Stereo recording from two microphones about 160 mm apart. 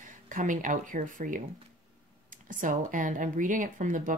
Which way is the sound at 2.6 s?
55° right (ahead or behind).